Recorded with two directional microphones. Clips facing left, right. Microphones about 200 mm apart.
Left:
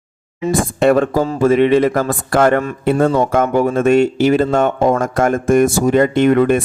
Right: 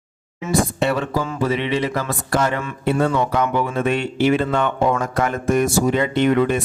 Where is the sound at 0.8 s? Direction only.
50° left (ahead or behind).